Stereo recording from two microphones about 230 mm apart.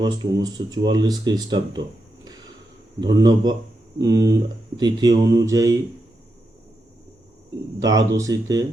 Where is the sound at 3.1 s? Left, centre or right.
Centre.